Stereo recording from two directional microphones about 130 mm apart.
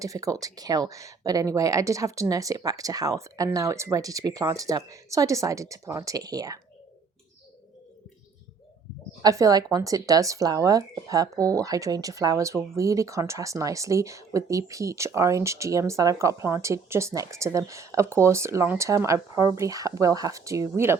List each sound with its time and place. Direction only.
0.0 s speech: 25° right (ahead or behind)
9.2 s speech: 25° right (ahead or behind)